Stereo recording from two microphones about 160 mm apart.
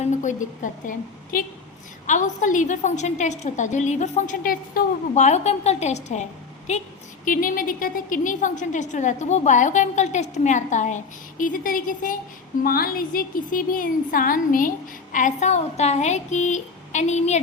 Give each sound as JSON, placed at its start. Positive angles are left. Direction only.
{"t": 0.0, "sound": "a woman's voice", "side_deg": 50}
{"t": 7.3, "sound": "a woman's voice", "side_deg": 60}